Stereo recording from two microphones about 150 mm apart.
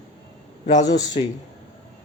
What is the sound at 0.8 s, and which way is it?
Speech, 25° left (ahead or behind).